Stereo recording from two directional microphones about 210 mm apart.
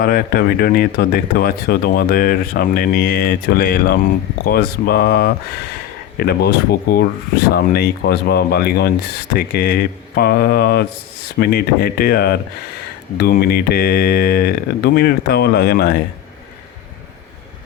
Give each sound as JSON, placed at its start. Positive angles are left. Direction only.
{"t": 0.0, "sound": "speech", "side_deg": 45}